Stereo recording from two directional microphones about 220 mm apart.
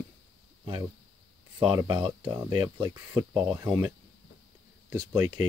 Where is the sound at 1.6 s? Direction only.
20° right (ahead or behind).